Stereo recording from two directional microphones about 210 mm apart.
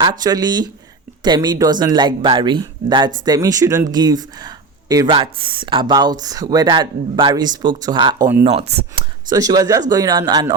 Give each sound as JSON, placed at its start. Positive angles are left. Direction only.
{"t": 0.0, "sound": "speech", "side_deg": -20}
{"t": 9.3, "sound": "speech", "side_deg": -15}